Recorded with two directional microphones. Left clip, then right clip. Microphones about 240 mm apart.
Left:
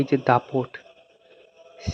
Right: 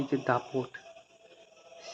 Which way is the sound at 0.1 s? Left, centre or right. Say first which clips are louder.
Left 9 dB; left.